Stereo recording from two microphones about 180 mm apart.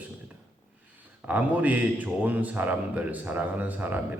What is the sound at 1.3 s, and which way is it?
A man's voice, 10° right (ahead or behind).